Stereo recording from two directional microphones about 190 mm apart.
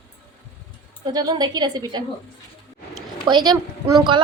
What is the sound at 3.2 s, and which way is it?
Speech, 25° right (ahead or behind).